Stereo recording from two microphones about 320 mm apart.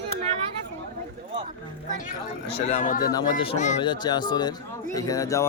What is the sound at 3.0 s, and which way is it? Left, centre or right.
Speech, centre.